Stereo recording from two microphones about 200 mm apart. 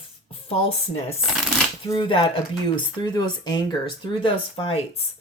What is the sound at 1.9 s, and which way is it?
Speech, 25° left (ahead or behind).